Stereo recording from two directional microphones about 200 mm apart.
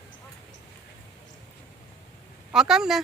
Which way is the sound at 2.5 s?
5° right (ahead or behind).